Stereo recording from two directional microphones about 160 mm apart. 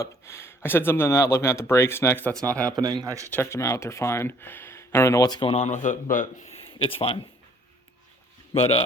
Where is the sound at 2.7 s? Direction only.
25° right (ahead or behind).